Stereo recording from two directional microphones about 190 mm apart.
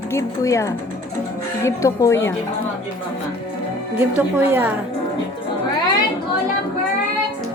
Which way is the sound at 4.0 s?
10° right (ahead or behind).